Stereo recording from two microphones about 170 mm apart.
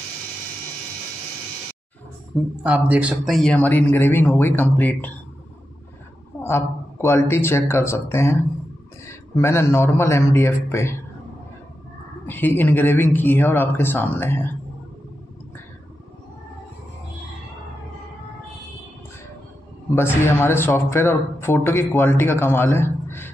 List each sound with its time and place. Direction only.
2.6 s a man's voice: 10° right (ahead or behind); by 5.1 s 10° left (ahead or behind)
6.4 s a man's voice: 15° left (ahead or behind)
12.3 s a man's voice: 10° left (ahead or behind)
20.0 s a man's voice: 15° left (ahead or behind)